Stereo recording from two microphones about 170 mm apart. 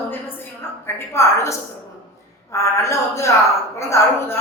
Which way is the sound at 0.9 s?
15° left (ahead or behind).